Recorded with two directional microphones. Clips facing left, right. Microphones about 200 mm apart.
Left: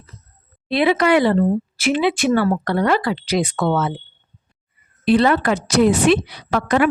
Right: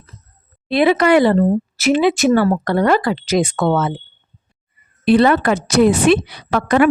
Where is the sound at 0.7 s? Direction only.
45° right (ahead or behind).